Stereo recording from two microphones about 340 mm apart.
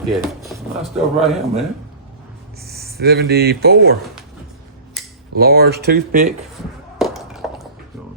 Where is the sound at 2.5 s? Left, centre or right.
Right.